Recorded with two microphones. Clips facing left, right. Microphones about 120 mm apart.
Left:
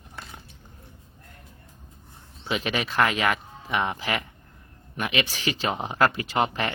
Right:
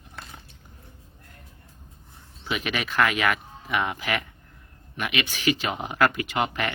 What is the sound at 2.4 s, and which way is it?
Speech, 30° left (ahead or behind).